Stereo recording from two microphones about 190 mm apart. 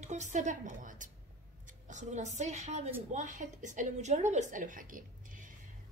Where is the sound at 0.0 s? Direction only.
40° right (ahead or behind).